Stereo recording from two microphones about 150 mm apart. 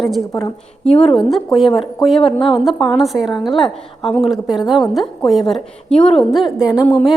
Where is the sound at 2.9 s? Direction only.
Centre (ahead or behind).